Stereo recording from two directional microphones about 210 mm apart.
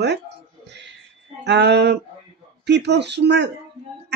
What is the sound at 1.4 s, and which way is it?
Speech, 55° right (ahead or behind).